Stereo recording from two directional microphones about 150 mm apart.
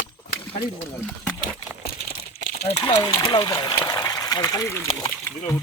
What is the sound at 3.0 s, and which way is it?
Speech, 25° left (ahead or behind).